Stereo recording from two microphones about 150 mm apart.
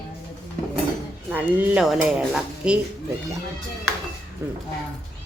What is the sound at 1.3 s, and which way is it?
Speech, 10° right (ahead or behind).